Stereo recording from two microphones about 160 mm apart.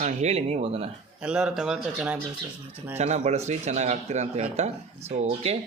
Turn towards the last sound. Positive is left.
turn(degrees=-40)  # may be behind; listen again after turning